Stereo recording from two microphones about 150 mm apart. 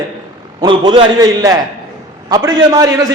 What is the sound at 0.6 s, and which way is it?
Speech, 35° right (ahead or behind).